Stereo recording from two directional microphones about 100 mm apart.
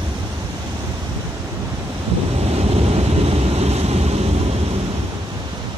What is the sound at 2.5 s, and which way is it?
Vehicle, 85° right.